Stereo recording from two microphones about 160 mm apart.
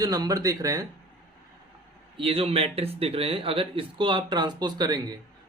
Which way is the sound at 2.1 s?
35° right (ahead or behind).